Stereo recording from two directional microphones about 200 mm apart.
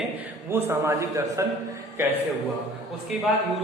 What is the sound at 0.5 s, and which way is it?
Speech, 10° right (ahead or behind).